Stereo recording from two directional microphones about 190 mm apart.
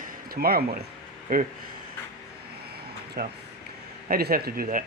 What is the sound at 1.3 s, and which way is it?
Speech, 50° right (ahead or behind).